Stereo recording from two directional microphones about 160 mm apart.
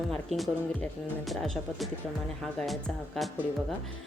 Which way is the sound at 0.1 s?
Centre (ahead or behind).